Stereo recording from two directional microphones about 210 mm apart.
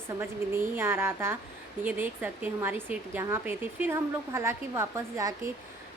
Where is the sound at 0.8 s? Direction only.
10° right (ahead or behind).